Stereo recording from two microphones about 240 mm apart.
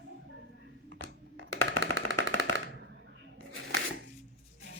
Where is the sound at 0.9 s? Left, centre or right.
Right.